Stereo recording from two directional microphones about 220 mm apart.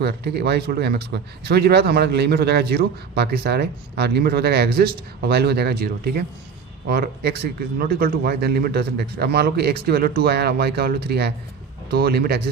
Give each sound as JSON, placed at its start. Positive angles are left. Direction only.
{"t": 0.0, "sound": "speech", "side_deg": -45}